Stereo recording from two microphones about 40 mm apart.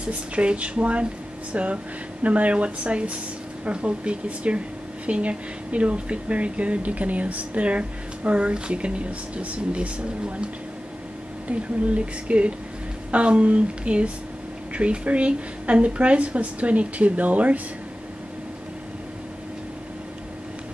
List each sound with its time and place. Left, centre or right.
0.4 s speech: right